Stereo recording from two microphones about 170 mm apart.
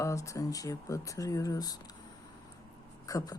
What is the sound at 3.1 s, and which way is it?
Speech, 20° left (ahead or behind).